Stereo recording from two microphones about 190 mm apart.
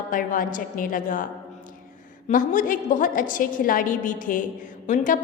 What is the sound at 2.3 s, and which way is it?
A woman's voice, 45° left (ahead or behind).